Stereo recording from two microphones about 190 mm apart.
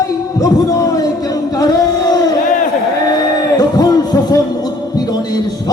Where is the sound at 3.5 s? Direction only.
20° left (ahead or behind).